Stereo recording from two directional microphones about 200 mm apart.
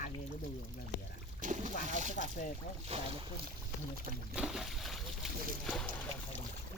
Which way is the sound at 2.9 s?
30° right (ahead or behind).